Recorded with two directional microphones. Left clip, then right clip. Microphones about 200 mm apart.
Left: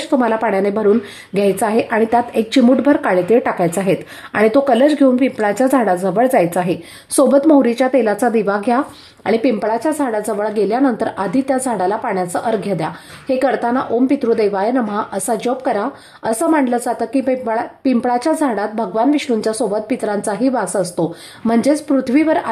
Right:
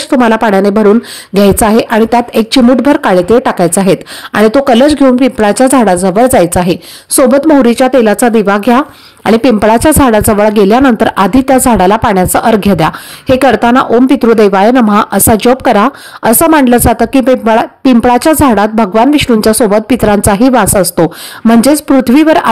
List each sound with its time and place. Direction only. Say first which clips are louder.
0.1 s speech: right 8 dB; 30° right (ahead or behind)